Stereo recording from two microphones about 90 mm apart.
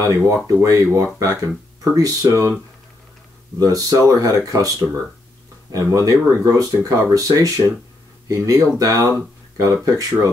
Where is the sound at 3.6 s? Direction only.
40° right (ahead or behind).